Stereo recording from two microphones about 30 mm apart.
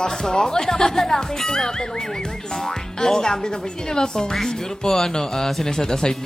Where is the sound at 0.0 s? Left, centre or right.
Left.